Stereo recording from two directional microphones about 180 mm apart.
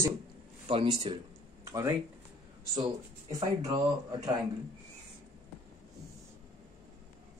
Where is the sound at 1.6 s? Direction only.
15° right (ahead or behind).